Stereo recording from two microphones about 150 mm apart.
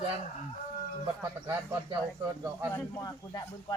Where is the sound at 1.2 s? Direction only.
25° right (ahead or behind).